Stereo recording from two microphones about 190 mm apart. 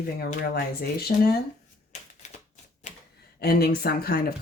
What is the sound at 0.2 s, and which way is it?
Speech, 50° left (ahead or behind).